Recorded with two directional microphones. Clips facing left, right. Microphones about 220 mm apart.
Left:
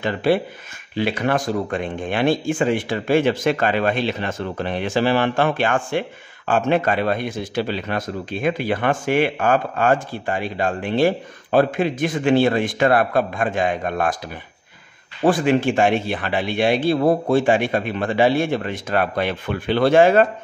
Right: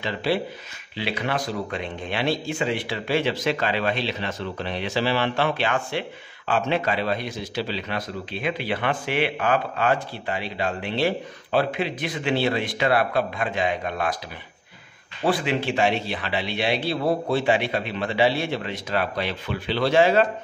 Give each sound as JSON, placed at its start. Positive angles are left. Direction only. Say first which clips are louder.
{"t": 0.0, "sound": "speech", "louder": "left 6 dB", "side_deg": 50}
{"t": 15.2, "sound": "speech", "louder": "left 6 dB", "side_deg": 50}